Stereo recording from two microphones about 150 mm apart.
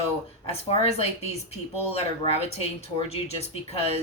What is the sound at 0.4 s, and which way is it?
Speech, 45° left (ahead or behind).